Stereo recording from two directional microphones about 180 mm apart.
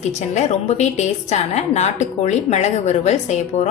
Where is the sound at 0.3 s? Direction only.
40° left (ahead or behind).